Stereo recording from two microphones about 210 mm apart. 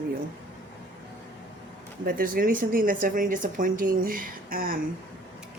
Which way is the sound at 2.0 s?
40° right (ahead or behind).